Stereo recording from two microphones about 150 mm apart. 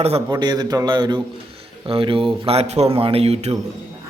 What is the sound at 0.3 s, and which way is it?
A man's voice, 30° right (ahead or behind).